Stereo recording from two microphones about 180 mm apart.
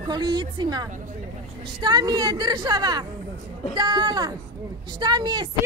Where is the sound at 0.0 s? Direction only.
25° right (ahead or behind).